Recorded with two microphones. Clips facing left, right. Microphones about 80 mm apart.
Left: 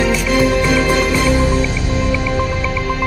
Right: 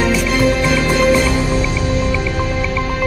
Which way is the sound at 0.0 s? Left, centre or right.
Centre.